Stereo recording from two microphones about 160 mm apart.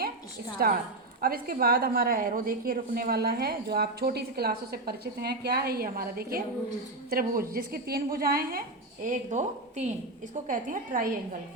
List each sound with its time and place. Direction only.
1.2 s a woman's voice: 65° right (ahead or behind)
9.0 s a woman's voice: 50° right (ahead or behind)